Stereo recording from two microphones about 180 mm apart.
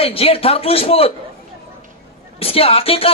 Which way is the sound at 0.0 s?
35° left (ahead or behind).